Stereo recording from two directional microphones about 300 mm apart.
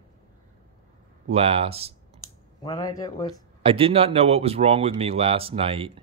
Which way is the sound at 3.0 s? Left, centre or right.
Centre.